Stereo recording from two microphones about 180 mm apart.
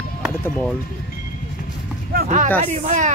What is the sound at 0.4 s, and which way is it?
Speech, 10° left (ahead or behind).